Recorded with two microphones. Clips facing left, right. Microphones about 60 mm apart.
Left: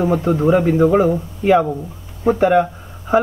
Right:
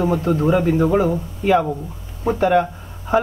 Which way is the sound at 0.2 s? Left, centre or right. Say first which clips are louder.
Left 2 dB; centre.